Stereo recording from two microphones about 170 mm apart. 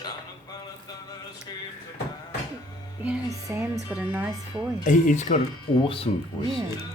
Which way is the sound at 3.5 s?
10° right (ahead or behind).